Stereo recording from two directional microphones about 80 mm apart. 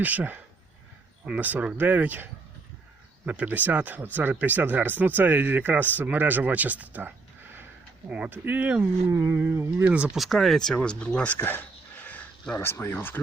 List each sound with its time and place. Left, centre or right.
0.0 s speech: right
8.3 s speech: right
9.1 s a sound: right
9.8 s speech: centre
10.2 s speech: centre
11.3 s a sound: left
12.5 s speech: left